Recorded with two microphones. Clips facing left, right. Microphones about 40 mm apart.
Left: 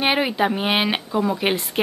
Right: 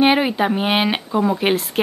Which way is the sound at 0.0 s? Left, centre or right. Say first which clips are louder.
Right 4 dB; centre.